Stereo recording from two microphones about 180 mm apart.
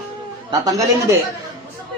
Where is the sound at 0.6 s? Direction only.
20° right (ahead or behind).